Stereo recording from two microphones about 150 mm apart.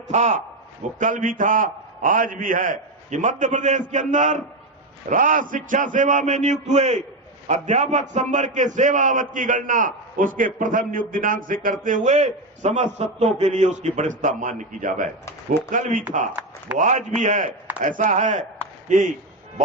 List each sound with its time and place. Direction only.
0.1 s a man's voice: 50° right (ahead or behind)